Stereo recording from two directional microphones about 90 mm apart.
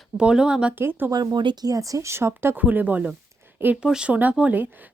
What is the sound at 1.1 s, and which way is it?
Speech, 50° right (ahead or behind).